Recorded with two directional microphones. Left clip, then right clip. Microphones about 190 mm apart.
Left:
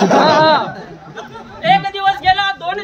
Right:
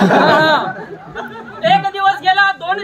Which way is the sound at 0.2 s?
45° right (ahead or behind).